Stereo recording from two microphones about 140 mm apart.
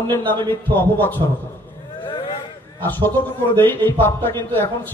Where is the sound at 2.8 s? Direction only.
15° left (ahead or behind).